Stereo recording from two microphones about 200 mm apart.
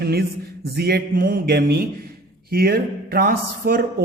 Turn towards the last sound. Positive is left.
turn(degrees=-50)  # may be behind; listen again after turning